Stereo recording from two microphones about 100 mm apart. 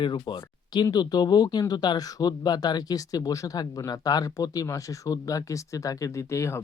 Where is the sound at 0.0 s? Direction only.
50° left (ahead or behind).